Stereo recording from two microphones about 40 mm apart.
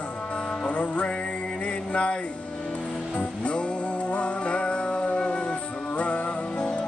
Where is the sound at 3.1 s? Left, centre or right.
Left.